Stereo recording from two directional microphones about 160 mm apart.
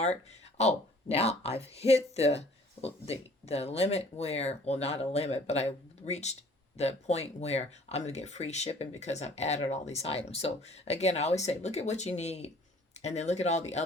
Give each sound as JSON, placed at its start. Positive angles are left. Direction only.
{"t": 0.0, "sound": "speech", "side_deg": 45}